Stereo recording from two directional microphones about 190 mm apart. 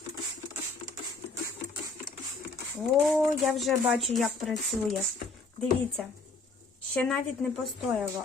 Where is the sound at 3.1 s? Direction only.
Centre (ahead or behind).